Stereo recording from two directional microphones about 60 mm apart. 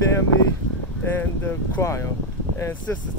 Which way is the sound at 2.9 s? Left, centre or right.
Left.